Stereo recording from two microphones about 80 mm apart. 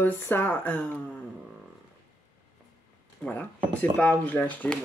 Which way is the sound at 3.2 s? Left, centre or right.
Centre.